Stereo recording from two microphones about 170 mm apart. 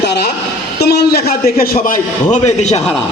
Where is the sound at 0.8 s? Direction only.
70° left (ahead or behind); by 2.8 s 45° left (ahead or behind).